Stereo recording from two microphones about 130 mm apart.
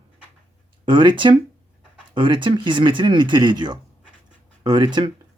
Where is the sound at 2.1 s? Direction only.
40° right (ahead or behind).